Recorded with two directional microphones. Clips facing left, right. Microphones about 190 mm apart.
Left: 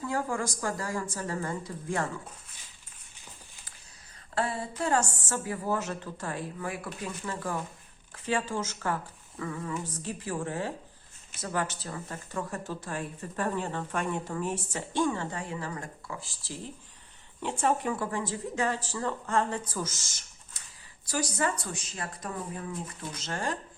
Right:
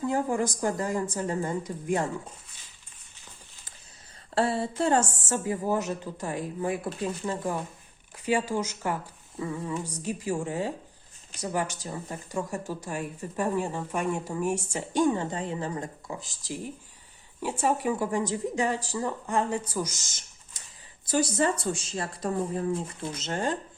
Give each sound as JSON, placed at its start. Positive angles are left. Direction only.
{"t": 0.0, "sound": "a woman's voice", "side_deg": -20}
{"t": 4.4, "sound": "a woman's voice", "side_deg": -30}
{"t": 21.1, "sound": "a woman's voice", "side_deg": -25}